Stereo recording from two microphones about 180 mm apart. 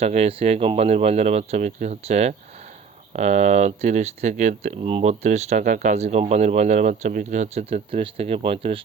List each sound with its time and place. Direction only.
0.0 s speech: 35° right (ahead or behind)